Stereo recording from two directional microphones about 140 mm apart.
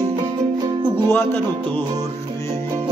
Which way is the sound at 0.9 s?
15° left (ahead or behind).